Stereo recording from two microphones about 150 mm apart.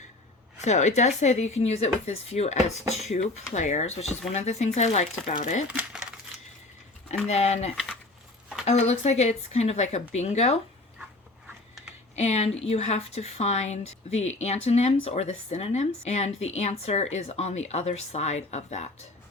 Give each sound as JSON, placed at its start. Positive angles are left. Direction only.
{"t": 0.6, "sound": "speech", "side_deg": 50}
{"t": 5.6, "sound": "speech", "side_deg": -5}
{"t": 7.3, "sound": "speech", "side_deg": 45}
{"t": 12.1, "sound": "speech", "side_deg": 50}